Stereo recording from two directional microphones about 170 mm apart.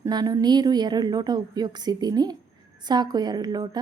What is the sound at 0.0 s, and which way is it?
Speech, 25° right (ahead or behind).